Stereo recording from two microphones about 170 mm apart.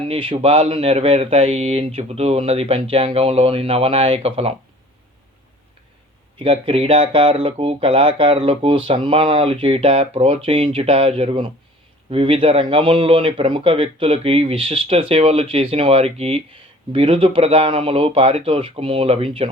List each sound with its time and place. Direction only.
0.1 s speech: 30° right (ahead or behind)
6.4 s speech: 35° right (ahead or behind)